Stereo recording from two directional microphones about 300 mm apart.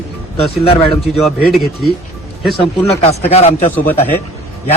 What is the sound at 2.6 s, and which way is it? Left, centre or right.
Speech, centre.